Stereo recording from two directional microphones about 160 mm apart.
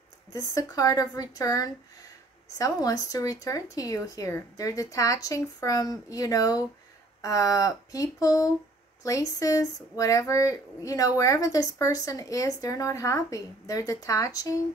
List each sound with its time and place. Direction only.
0.3 s speech: 20° left (ahead or behind)